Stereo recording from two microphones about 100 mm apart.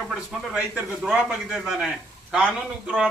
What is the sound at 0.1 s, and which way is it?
A man's voice, 10° right (ahead or behind).